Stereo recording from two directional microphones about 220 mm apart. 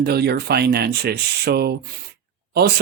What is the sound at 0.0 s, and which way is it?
Speech, 45° right (ahead or behind).